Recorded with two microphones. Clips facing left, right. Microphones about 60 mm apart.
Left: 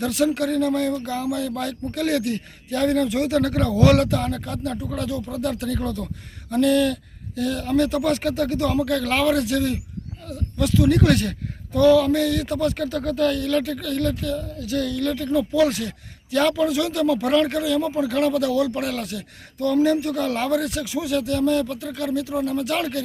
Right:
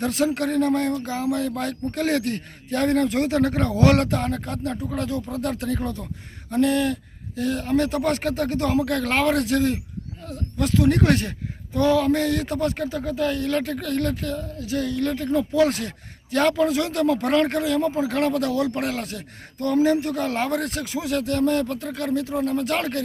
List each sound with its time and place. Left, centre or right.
0.0 s speech: right
14.7 s speech: right